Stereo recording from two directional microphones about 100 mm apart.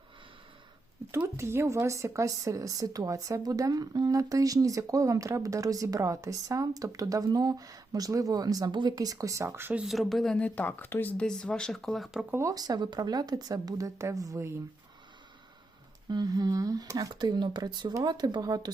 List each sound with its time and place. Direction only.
1.4 s speech: 25° right (ahead or behind)
9.7 s speech: 5° right (ahead or behind); by 11.3 s 20° left (ahead or behind)
11.3 s speech: 10° left (ahead or behind)
12.3 s speech: 30° right (ahead or behind)
16.0 s speech: 45° right (ahead or behind)